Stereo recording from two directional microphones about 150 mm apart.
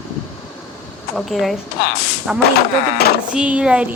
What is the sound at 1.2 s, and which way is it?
Speech, centre (ahead or behind).